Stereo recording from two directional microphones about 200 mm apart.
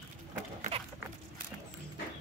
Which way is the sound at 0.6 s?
30° right (ahead or behind).